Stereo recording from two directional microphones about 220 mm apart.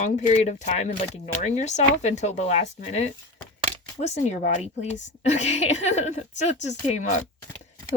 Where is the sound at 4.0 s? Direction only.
30° left (ahead or behind).